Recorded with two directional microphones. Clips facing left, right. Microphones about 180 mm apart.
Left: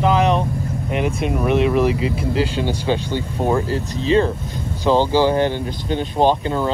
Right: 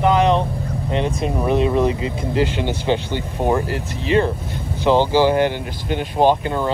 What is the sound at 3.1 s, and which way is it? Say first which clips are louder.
Speech: even; 15° right (ahead or behind).